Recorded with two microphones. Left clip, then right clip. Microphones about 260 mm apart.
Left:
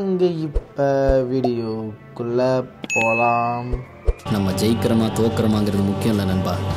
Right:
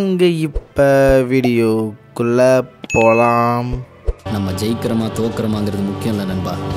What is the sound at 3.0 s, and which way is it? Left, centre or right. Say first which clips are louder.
Speech: right 6 dB; right.